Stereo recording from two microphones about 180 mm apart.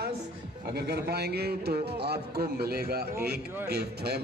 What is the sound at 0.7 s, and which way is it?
A man's voice, 65° right (ahead or behind).